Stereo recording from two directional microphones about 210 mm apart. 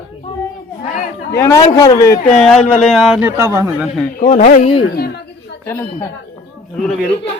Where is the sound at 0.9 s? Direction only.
40° left (ahead or behind).